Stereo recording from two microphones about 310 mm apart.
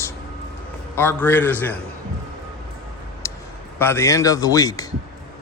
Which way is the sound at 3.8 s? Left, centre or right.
Centre.